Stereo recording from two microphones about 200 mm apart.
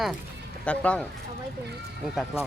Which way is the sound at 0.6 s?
5° left (ahead or behind).